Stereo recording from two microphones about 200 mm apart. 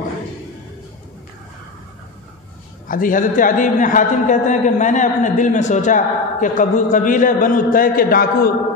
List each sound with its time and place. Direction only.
2.9 s a man's voice: 45° left (ahead or behind)